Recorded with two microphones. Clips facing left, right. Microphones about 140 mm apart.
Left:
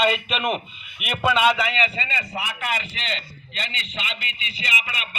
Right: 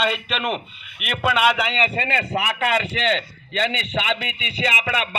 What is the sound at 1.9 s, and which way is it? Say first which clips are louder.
Speech: right 6 dB; 60° right (ahead or behind).